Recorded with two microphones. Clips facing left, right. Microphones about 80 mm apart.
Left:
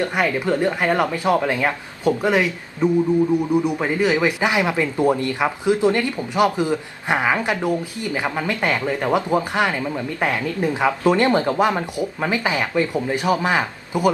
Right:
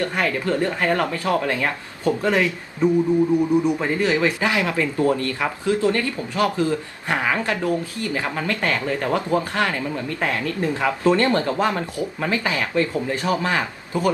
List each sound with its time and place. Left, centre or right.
0.0 s speech: centre